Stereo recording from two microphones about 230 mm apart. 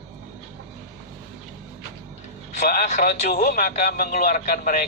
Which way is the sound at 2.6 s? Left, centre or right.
Left.